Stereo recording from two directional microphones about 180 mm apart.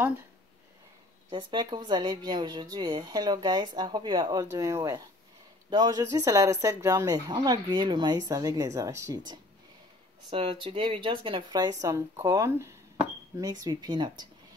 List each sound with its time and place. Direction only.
1.3 s speech: 25° right (ahead or behind)
10.3 s speech: 30° right (ahead or behind)